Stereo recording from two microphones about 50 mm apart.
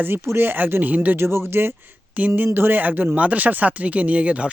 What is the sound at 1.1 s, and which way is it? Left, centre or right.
Speech, right.